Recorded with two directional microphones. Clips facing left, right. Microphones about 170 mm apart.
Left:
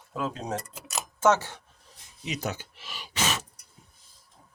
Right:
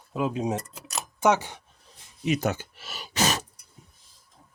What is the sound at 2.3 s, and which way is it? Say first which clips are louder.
Gasp: right 7 dB; 55° right (ahead or behind).